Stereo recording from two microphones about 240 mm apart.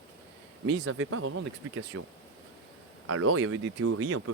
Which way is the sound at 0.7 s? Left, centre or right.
Right.